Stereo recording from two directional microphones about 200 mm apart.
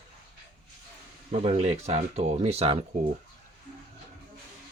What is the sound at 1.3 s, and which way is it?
Speech, 35° right (ahead or behind).